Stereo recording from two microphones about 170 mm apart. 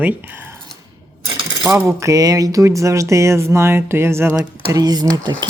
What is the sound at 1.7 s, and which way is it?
Speech, 15° right (ahead or behind).